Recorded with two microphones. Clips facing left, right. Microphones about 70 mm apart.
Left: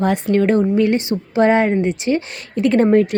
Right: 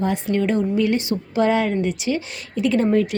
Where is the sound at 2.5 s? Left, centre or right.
Left.